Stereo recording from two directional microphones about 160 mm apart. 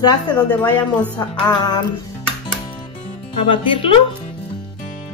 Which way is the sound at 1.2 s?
25° left (ahead or behind).